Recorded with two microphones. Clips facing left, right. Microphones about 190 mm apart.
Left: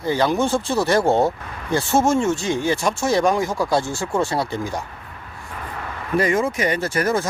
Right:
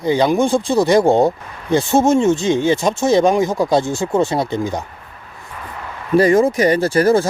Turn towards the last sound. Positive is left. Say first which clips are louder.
# right 7 dB
turn(degrees=-30)  # may be behind; listen again after turning